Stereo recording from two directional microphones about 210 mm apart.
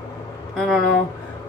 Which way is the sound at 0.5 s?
Centre (ahead or behind).